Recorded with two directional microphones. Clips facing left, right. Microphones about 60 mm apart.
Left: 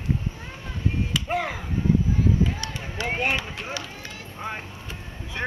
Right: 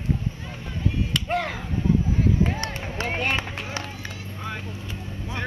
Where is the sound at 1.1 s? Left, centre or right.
Centre.